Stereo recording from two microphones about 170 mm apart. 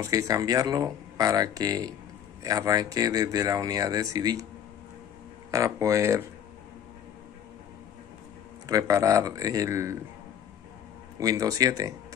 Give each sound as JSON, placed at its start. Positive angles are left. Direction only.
{"t": 0.0, "sound": "speech", "side_deg": -20}
{"t": 5.5, "sound": "speech", "side_deg": -20}
{"t": 8.6, "sound": "speech", "side_deg": -20}
{"t": 11.1, "sound": "speech", "side_deg": -20}